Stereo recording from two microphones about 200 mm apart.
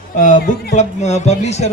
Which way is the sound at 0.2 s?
45° left (ahead or behind).